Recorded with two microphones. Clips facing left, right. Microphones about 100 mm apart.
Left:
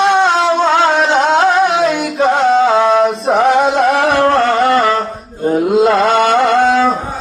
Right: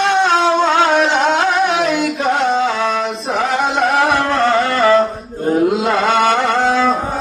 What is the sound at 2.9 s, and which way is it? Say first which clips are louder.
Male singing: left 8 dB; 40° left (ahead or behind).